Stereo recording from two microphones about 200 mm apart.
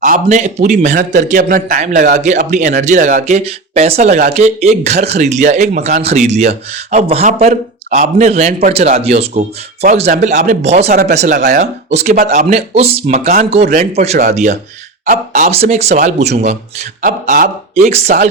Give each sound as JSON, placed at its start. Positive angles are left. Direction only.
{"t": 0.0, "sound": "speech", "side_deg": -40}
{"t": 7.4, "sound": "speech", "side_deg": -40}